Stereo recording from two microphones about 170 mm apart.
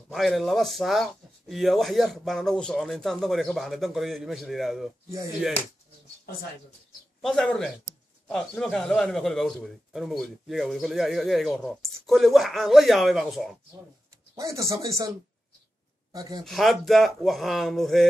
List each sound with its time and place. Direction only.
0.1 s a man's voice: centre (ahead or behind)
7.2 s a man's voice: 5° left (ahead or behind)
14.3 s speech: 20° right (ahead or behind)
16.4 s a man's voice: centre (ahead or behind)